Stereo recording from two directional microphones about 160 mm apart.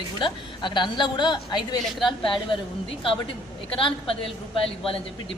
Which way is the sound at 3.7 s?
35° left (ahead or behind).